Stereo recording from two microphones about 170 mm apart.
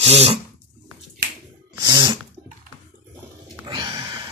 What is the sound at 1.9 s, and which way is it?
Sneeze, 25° right (ahead or behind).